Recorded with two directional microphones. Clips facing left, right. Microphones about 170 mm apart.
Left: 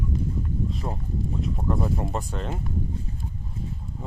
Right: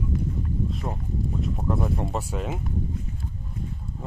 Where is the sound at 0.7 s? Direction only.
Centre (ahead or behind).